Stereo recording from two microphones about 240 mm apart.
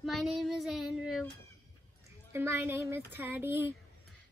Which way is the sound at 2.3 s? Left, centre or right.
Centre.